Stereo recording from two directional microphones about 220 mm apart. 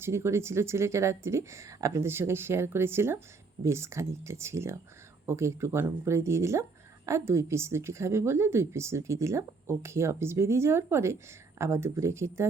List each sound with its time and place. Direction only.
0.0 s speech: 10° right (ahead or behind)